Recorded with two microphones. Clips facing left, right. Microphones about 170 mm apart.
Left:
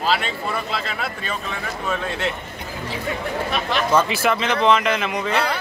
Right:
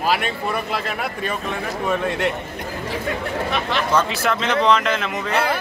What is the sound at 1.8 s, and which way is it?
Speech, 5° right (ahead or behind).